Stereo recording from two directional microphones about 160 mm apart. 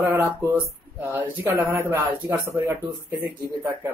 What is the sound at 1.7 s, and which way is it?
Speech, 15° right (ahead or behind).